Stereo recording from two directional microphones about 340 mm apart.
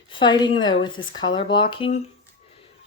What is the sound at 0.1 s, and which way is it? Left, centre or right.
Speech, centre.